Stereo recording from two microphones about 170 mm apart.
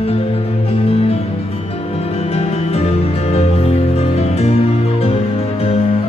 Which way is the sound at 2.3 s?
40° left (ahead or behind).